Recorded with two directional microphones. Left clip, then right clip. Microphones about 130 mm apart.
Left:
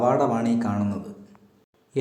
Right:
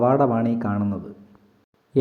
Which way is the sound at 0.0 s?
40° right (ahead or behind).